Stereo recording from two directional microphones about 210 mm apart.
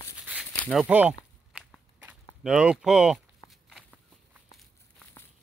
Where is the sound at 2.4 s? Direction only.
5° right (ahead or behind).